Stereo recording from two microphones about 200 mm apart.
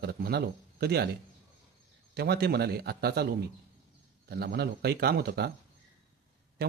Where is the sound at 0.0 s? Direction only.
50° right (ahead or behind).